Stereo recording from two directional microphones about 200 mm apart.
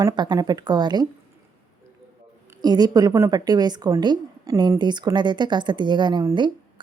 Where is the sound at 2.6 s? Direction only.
20° right (ahead or behind).